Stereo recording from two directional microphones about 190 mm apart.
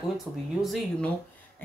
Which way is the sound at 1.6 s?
10° left (ahead or behind).